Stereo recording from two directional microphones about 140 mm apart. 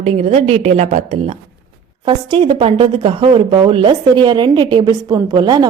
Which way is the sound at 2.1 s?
35° right (ahead or behind).